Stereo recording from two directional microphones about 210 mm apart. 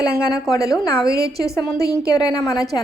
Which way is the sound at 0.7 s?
15° left (ahead or behind).